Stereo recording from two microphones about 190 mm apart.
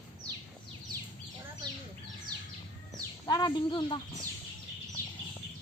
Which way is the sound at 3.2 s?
20° left (ahead or behind).